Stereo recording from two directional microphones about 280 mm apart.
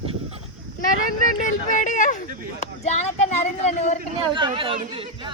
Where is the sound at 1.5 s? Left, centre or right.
Left.